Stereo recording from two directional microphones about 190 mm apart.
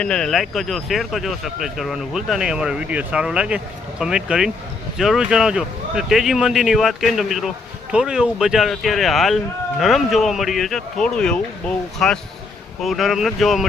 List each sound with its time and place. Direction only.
0.0 s speech: 5° left (ahead or behind)